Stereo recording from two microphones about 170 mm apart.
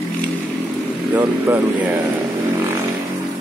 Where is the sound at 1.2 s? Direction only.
20° right (ahead or behind).